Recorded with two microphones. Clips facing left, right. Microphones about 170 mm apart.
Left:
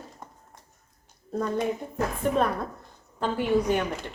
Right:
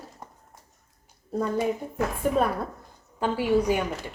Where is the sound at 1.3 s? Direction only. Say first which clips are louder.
Right 1 dB; 5° right (ahead or behind).